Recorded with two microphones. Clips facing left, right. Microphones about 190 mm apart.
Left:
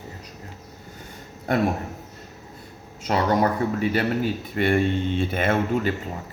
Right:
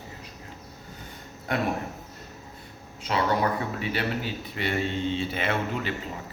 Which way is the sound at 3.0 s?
45° left (ahead or behind).